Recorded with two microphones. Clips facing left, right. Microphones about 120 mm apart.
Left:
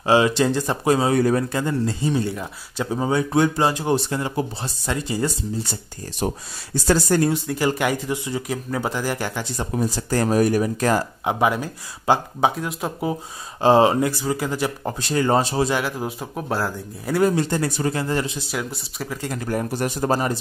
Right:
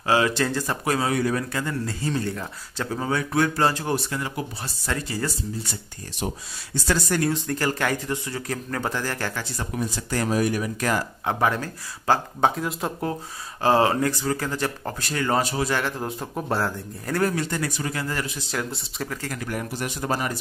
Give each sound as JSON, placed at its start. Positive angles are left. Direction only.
{"t": 0.0, "sound": "speech", "side_deg": 20}
{"t": 1.1, "sound": "speech", "side_deg": 35}
{"t": 1.5, "sound": "speech", "side_deg": 25}
{"t": 6.1, "sound": "speech", "side_deg": 40}
{"t": 7.4, "sound": "speech", "side_deg": 10}
{"t": 9.8, "sound": "speech", "side_deg": 35}
{"t": 11.2, "sound": "speech", "side_deg": 15}
{"t": 13.1, "sound": "speech", "side_deg": 20}
{"t": 15.7, "sound": "a man's voice", "side_deg": 5}
{"t": 17.2, "sound": "speech", "side_deg": 25}
{"t": 18.5, "sound": "a man's voice", "side_deg": 5}
{"t": 19.2, "sound": "speech", "side_deg": 30}